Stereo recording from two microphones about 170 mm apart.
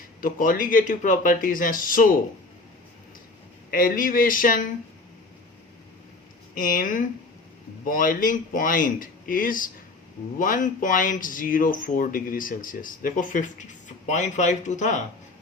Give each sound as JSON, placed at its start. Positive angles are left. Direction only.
{"t": 0.2, "sound": "speech", "side_deg": 55}
{"t": 3.7, "sound": "speech", "side_deg": 55}
{"t": 6.5, "sound": "speech", "side_deg": 55}